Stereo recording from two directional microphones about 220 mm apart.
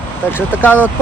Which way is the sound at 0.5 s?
10° left (ahead or behind).